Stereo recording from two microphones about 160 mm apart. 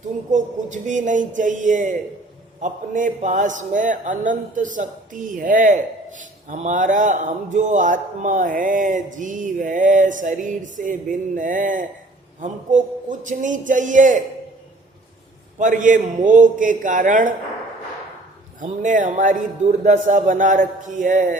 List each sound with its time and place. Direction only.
0.3 s a man's voice: 50° right (ahead or behind)
15.5 s a man's voice: 50° right (ahead or behind)
18.6 s a man's voice: 55° right (ahead or behind)